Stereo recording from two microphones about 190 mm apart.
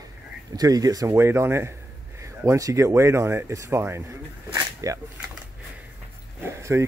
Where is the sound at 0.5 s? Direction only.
20° right (ahead or behind).